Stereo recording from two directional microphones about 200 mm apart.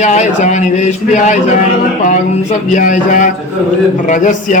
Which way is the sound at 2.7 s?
40° left (ahead or behind).